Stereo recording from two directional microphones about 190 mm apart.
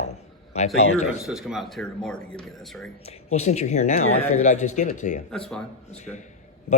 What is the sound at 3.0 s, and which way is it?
Speech, 35° left (ahead or behind).